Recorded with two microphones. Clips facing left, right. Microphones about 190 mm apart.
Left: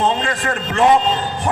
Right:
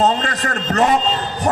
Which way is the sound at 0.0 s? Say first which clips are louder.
Right 1 dB; 40° right (ahead or behind).